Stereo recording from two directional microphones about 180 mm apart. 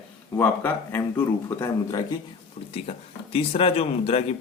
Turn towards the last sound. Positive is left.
turn(degrees=35)  # may be behind; listen again after turning